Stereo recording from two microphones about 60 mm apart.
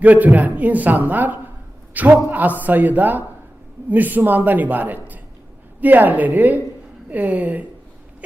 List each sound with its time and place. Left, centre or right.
0.0 s a man's voice: right